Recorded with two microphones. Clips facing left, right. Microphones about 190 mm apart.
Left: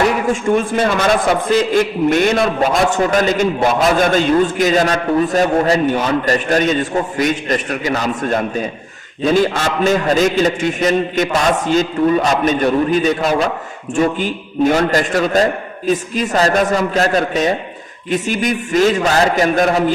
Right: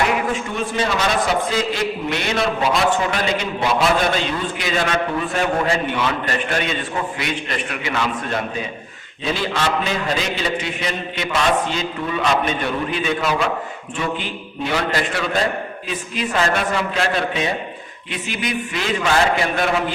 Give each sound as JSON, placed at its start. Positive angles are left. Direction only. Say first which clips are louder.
{"t": 0.5, "sound": "a man's voice", "louder": "left 8 dB", "side_deg": 50}